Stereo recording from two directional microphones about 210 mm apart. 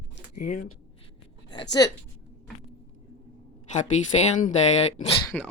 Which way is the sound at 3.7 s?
35° left (ahead or behind).